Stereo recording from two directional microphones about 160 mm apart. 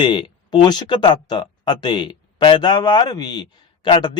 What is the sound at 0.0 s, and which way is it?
A man's voice, 30° left (ahead or behind).